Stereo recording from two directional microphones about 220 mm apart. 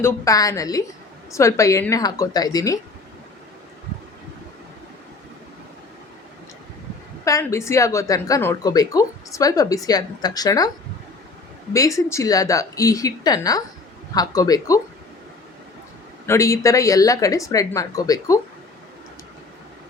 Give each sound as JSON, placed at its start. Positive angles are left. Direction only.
{"t": 0.0, "sound": "a woman's voice", "side_deg": 15}
{"t": 7.3, "sound": "a woman's voice", "side_deg": 15}
{"t": 11.7, "sound": "a woman's voice", "side_deg": 15}
{"t": 16.2, "sound": "a woman's voice", "side_deg": 15}